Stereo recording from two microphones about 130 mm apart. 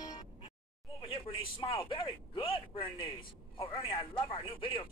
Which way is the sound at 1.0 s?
45° left (ahead or behind).